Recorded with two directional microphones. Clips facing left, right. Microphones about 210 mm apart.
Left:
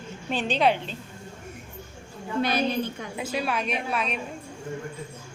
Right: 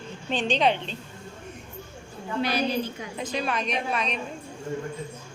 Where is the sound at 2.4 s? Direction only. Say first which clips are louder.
Left 1 dB; 50° left (ahead or behind).